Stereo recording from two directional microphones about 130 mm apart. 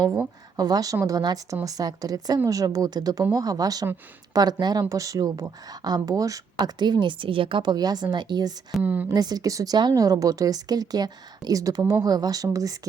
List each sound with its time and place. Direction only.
0.5 s speech: 30° right (ahead or behind)
8.8 s a woman's voice: 10° right (ahead or behind)
9.0 s speech: 30° right (ahead or behind)